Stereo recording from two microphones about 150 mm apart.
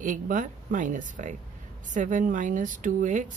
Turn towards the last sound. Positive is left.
turn(degrees=-60)  # may be behind; listen again after turning